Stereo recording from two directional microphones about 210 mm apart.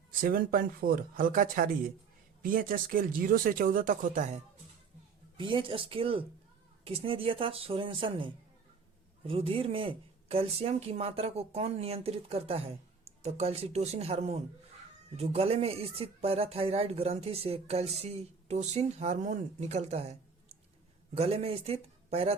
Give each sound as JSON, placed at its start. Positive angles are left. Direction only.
{"t": 0.2, "sound": "speech", "side_deg": -45}
{"t": 5.4, "sound": "speech", "side_deg": -25}
{"t": 21.2, "sound": "speech", "side_deg": -30}